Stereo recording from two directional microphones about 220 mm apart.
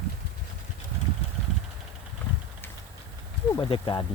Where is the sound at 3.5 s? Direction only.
20° left (ahead or behind).